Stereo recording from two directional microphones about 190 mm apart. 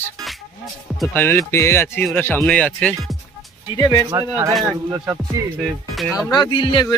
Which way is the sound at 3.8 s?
20° left (ahead or behind).